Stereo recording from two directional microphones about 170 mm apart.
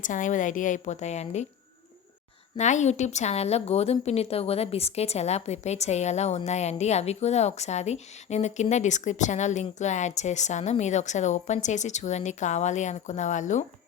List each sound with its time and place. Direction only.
0.0 s a woman's voice: 50° left (ahead or behind)
2.6 s a woman's voice: 45° left (ahead or behind)